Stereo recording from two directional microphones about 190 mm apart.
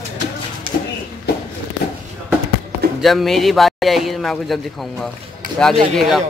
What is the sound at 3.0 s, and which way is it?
Speech, centre (ahead or behind).